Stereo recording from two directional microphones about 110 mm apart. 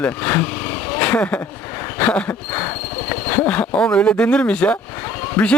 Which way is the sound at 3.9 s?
10° left (ahead or behind).